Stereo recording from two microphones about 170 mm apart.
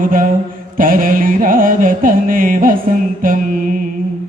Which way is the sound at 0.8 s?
55° right (ahead or behind).